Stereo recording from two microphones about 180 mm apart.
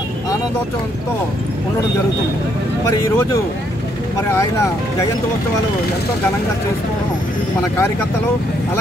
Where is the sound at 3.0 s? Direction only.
15° left (ahead or behind).